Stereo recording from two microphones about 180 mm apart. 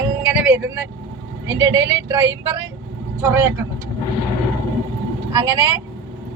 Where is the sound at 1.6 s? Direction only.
15° right (ahead or behind).